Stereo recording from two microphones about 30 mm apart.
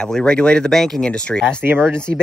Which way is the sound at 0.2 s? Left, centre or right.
Left.